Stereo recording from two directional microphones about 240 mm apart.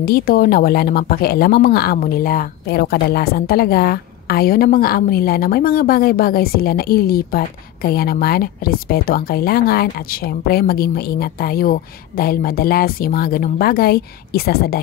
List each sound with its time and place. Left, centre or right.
0.0 s speech: left